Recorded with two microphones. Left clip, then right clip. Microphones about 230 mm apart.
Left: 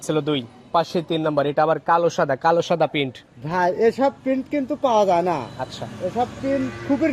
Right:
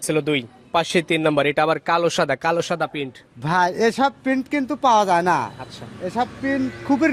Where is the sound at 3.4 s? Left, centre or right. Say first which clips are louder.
Right 1 dB; right.